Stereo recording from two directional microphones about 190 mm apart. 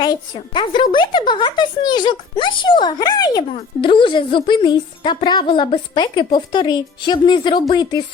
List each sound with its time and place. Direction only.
0.0 s speech: 25° left (ahead or behind)